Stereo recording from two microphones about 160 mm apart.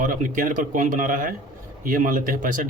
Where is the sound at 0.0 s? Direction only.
55° right (ahead or behind).